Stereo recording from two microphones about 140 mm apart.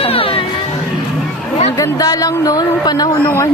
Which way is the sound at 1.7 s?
25° left (ahead or behind).